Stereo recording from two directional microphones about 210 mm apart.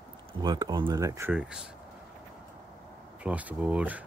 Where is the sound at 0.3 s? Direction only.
20° right (ahead or behind); by 1.7 s 5° right (ahead or behind).